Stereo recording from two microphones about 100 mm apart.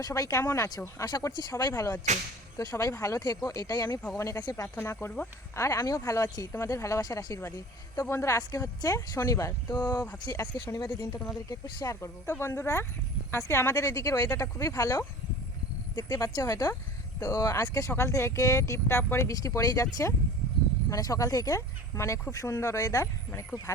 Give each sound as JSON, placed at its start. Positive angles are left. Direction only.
{"t": 0.0, "sound": "speech", "side_deg": 35}
{"t": 1.0, "sound": "speech", "side_deg": 40}
{"t": 1.7, "sound": "a woman's voice", "side_deg": 25}
{"t": 2.6, "sound": "a woman's voice", "side_deg": 35}
{"t": 5.5, "sound": "speech", "side_deg": 35}
{"t": 10.2, "sound": "speech", "side_deg": 30}
{"t": 10.8, "sound": "a woman's voice", "side_deg": 40}